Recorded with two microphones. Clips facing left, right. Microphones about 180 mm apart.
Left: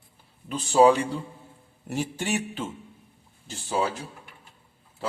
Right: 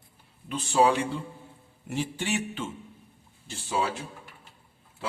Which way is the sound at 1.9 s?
40° left (ahead or behind).